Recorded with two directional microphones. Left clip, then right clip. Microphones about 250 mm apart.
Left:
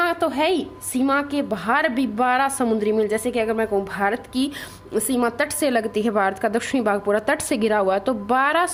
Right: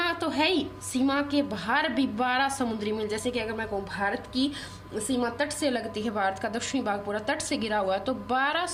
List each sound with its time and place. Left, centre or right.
0.0 s a woman's voice: left